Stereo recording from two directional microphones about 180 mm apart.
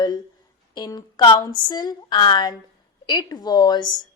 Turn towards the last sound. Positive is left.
turn(degrees=25)  # may be behind; listen again after turning